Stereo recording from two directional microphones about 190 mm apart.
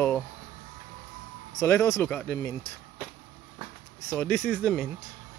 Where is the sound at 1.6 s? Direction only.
15° left (ahead or behind).